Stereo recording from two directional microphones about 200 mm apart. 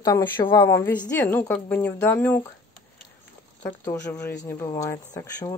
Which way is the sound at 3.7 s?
15° left (ahead or behind).